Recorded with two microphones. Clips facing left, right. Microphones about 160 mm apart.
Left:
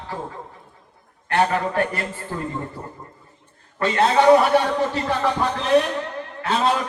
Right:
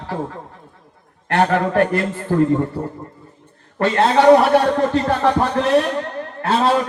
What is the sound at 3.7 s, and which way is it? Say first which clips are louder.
A man's voice: right 3 dB; 55° right (ahead or behind).